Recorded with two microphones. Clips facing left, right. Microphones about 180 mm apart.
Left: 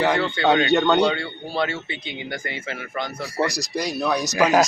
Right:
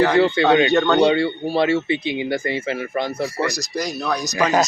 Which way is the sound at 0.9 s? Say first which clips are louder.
Right 5 dB; 30° right (ahead or behind).